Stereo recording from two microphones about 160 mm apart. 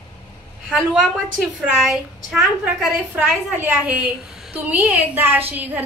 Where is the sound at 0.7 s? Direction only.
Centre (ahead or behind).